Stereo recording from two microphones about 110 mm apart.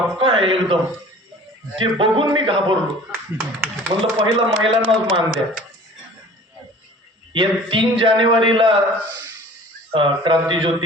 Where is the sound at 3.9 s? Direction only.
70° right (ahead or behind).